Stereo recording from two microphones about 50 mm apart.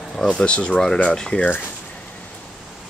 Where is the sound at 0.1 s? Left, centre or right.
Centre.